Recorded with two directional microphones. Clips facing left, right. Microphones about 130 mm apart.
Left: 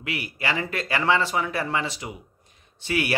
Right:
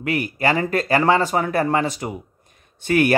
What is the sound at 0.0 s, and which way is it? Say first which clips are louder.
Speech: right 9 dB; 45° right (ahead or behind).